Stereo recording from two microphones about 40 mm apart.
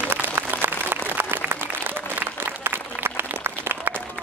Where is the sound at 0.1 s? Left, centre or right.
Right.